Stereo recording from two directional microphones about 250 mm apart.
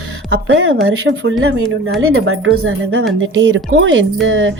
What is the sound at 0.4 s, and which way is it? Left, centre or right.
Speech, right.